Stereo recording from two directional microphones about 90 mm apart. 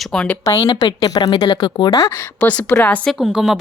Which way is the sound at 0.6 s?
60° left (ahead or behind).